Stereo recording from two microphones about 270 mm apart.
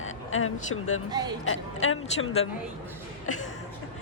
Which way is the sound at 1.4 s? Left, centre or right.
Left.